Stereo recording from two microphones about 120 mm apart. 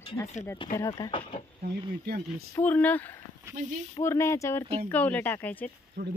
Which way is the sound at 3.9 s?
25° left (ahead or behind).